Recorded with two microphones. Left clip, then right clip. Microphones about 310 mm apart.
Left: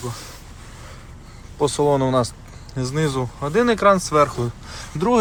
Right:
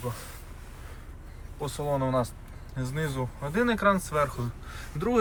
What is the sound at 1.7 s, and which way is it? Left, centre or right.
Speech, centre.